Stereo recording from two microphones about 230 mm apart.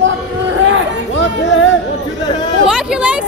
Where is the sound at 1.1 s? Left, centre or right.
Left.